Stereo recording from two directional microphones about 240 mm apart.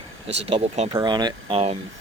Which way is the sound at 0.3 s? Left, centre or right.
Right.